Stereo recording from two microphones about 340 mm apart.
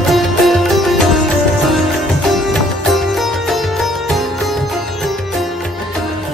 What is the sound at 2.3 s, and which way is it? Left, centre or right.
Music, centre.